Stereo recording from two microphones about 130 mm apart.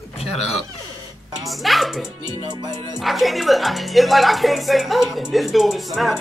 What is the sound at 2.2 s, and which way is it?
Music, 30° right (ahead or behind).